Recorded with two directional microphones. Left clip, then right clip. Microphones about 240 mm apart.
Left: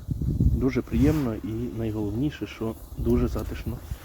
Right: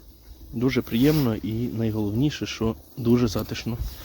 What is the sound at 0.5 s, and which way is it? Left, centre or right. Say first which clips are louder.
Speech: right 4 dB; right.